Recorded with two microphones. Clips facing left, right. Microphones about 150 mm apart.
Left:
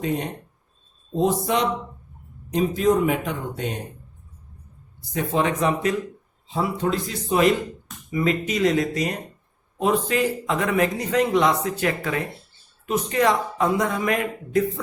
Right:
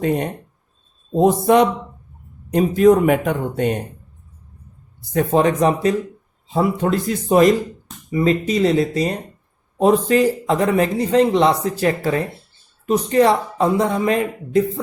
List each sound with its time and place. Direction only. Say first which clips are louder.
1.1 s speech: right 8 dB; 55° right (ahead or behind)
5.1 s speech: right 7 dB; 40° right (ahead or behind)
6.5 s speech: right 5 dB; 50° right (ahead or behind)
8.1 s speech: right 5 dB; 35° right (ahead or behind)